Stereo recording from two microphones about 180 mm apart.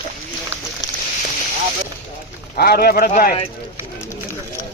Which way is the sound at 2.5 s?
60° left (ahead or behind).